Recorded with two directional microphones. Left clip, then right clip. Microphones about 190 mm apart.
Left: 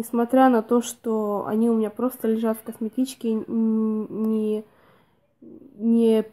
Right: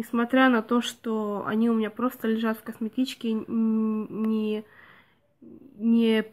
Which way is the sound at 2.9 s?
45° right (ahead or behind).